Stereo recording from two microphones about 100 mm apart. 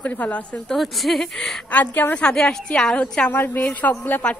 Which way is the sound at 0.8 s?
Centre (ahead or behind).